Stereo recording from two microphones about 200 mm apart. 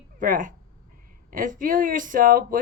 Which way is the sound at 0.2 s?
40° right (ahead or behind).